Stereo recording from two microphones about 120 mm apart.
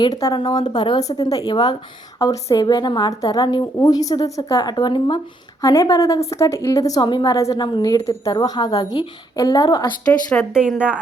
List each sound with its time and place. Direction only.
0.3 s a woman's voice: 35° left (ahead or behind)
5.6 s a woman's voice: 25° left (ahead or behind)
10.1 s speech: 10° left (ahead or behind)
10.5 s speech: 10° right (ahead or behind)